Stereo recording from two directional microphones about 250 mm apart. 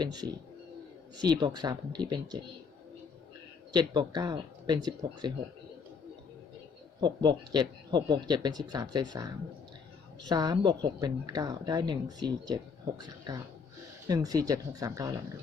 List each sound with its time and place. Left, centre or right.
0.0 s speech: centre
3.7 s speech: centre
7.0 s speech: centre
14.1 s speech: centre